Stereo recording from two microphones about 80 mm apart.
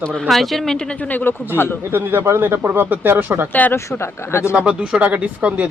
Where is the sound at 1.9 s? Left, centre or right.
Right.